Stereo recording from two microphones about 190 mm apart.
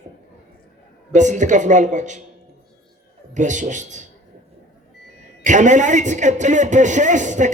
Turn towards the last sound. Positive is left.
turn(degrees=-40)  # may be behind; listen again after turning